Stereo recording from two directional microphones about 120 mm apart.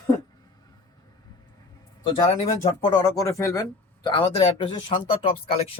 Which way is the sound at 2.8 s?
40° left (ahead or behind).